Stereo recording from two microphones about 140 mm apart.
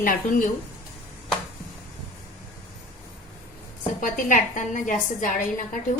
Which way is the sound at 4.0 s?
70° left (ahead or behind).